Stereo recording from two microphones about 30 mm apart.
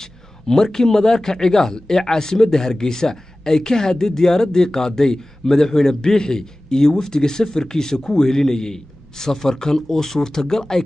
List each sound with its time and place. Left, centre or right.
0.0 s speech: centre